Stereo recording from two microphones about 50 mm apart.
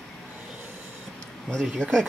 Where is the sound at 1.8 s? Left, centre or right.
Left.